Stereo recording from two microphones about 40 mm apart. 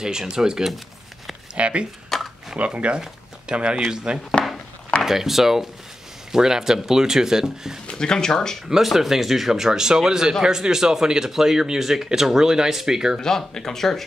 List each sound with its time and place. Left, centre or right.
0.0 s speech: centre
1.5 s speech: right
2.1 s a sound: centre
2.5 s speech: right
5.0 s speech: centre
7.9 s speech: centre
8.8 s speech: centre
13.2 s speech: centre